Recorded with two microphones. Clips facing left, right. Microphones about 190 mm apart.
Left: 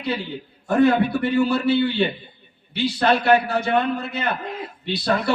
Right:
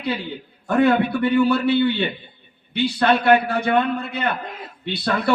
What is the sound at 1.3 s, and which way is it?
A man's voice, 60° right (ahead or behind).